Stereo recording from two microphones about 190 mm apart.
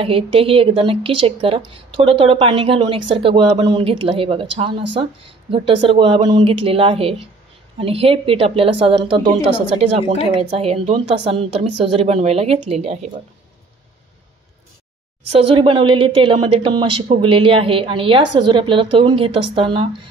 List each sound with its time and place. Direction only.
0.0 s a woman's voice: 30° right (ahead or behind)
15.3 s a woman's voice: 30° right (ahead or behind)